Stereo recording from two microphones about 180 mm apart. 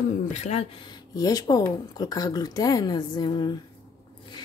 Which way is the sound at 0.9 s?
20° left (ahead or behind).